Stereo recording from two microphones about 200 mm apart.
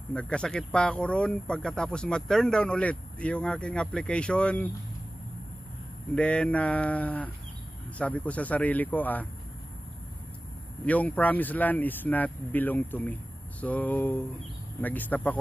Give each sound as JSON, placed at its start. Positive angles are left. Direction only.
{"t": 0.1, "sound": "speech", "side_deg": 5}
{"t": 6.1, "sound": "speech", "side_deg": 5}
{"t": 10.9, "sound": "speech", "side_deg": 5}